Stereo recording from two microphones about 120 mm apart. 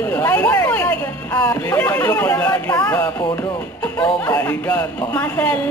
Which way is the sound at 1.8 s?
15° left (ahead or behind).